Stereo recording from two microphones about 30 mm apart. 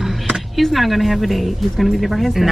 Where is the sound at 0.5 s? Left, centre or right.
Centre.